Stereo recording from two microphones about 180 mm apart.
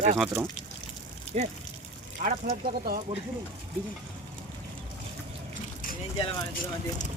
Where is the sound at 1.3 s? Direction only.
40° right (ahead or behind).